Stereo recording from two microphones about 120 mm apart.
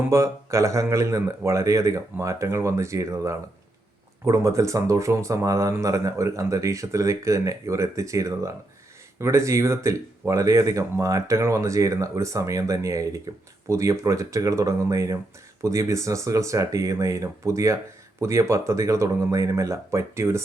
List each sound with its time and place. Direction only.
0.0 s speech: 25° right (ahead or behind)